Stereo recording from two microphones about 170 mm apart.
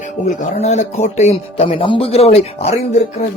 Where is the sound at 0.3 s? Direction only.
40° left (ahead or behind).